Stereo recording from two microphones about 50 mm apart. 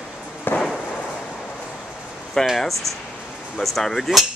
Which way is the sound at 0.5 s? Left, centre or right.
Centre.